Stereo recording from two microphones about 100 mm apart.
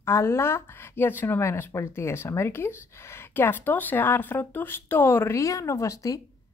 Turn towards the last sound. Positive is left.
turn(degrees=30)  # may be behind; listen again after turning